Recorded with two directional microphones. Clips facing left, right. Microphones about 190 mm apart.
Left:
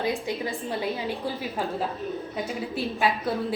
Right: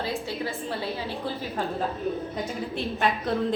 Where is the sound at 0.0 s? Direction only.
15° left (ahead or behind).